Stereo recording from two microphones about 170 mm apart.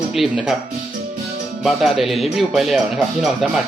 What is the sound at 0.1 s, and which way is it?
Speech, centre (ahead or behind).